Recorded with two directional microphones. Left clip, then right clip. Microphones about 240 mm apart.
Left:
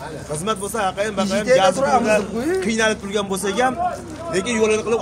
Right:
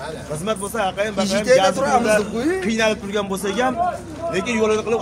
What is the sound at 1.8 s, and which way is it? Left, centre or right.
Speech, right.